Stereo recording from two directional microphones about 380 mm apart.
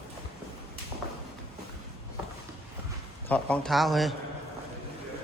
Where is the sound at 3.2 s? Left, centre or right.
Centre.